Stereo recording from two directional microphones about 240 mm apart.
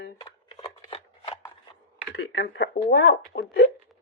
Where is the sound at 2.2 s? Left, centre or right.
Left.